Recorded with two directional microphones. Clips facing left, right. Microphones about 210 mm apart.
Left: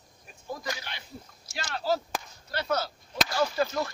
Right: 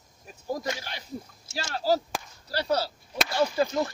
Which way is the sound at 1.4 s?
30° right (ahead or behind).